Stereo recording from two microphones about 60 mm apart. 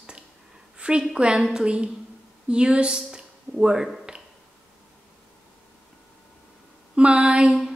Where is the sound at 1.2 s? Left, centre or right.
Centre.